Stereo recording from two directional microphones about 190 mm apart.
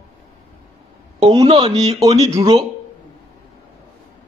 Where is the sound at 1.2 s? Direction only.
25° right (ahead or behind).